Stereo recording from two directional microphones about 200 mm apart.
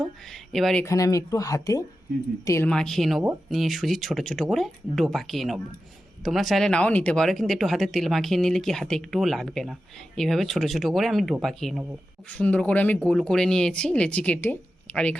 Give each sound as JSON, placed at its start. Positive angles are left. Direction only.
{"t": 0.3, "sound": "speech", "side_deg": 0}
{"t": 0.9, "sound": "speech", "side_deg": 15}
{"t": 2.6, "sound": "speech", "side_deg": 5}